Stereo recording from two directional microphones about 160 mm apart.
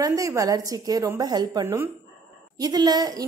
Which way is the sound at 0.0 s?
20° right (ahead or behind).